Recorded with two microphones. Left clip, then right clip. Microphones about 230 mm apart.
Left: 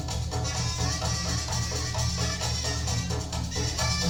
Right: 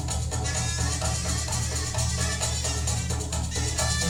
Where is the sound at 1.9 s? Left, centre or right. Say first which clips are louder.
Right 1 dB; right.